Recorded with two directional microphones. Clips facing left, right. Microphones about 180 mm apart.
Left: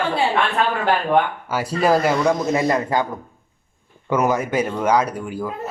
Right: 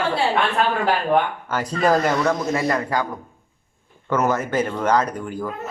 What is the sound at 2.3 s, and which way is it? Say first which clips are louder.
Speech: left 2 dB; 20° left (ahead or behind).